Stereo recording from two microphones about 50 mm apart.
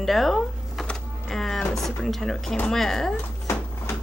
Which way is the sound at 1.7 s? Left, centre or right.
Centre.